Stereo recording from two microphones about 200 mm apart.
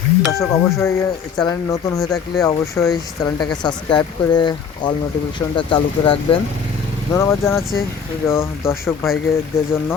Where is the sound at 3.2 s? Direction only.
20° left (ahead or behind).